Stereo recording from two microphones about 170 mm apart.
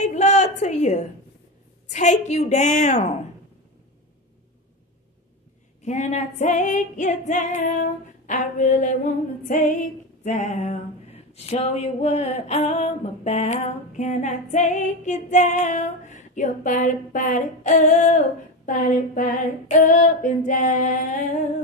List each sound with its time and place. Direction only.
0.0 s a sound: 40° left (ahead or behind)
1.9 s female singing: 45° left (ahead or behind)
5.8 s female singing: 40° left (ahead or behind)